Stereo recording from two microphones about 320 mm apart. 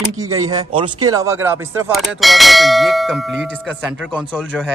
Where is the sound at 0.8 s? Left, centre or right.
Right.